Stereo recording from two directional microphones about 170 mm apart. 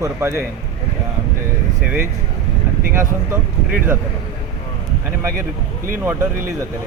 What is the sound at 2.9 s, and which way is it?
A man's voice, 15° right (ahead or behind).